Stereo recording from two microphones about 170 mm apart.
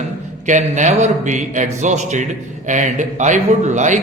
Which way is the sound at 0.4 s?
45° right (ahead or behind).